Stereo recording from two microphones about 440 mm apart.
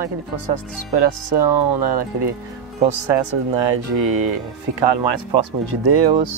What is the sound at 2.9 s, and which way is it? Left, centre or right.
Speech, right.